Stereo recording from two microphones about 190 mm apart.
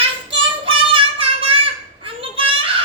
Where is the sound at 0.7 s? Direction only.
30° right (ahead or behind).